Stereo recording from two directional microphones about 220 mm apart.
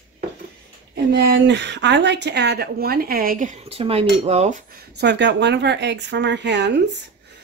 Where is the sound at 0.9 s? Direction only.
50° right (ahead or behind).